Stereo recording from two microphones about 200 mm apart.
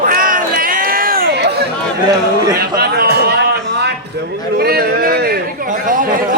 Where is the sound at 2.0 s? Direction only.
20° right (ahead or behind).